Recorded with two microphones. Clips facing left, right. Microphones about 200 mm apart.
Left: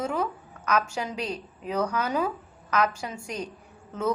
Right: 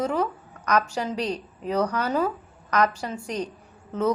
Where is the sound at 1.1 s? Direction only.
35° right (ahead or behind).